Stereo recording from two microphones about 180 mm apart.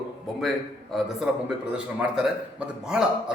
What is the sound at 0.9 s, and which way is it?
A man's voice, 5° right (ahead or behind).